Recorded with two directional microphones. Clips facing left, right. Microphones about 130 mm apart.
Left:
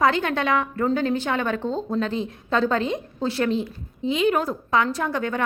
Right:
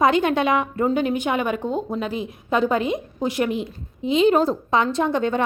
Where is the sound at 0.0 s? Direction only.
15° right (ahead or behind).